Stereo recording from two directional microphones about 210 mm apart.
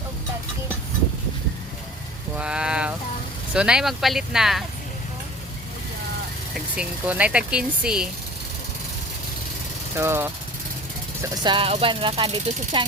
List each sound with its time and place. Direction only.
2.4 s vehicle: 5° right (ahead or behind)
3.5 s speech: 5° right (ahead or behind)
6.7 s speech: 5° right (ahead or behind)
9.9 s speech: 10° right (ahead or behind)
11.2 s speech: 25° right (ahead or behind)